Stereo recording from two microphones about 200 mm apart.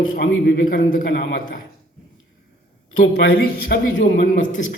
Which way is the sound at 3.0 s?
50° left (ahead or behind).